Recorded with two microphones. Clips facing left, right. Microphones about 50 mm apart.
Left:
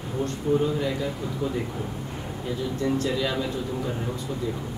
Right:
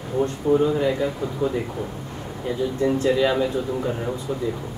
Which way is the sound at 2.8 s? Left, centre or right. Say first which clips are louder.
Right 6 dB; right.